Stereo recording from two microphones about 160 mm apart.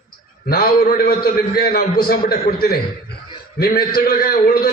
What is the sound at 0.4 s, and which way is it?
A man's voice, 65° left (ahead or behind).